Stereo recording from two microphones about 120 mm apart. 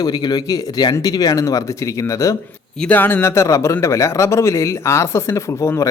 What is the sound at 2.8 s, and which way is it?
Speech, 15° left (ahead or behind).